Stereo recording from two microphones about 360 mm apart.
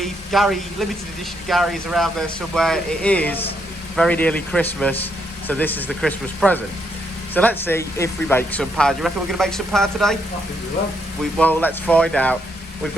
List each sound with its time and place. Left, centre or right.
0.0 s speech: centre
11.2 s speech: centre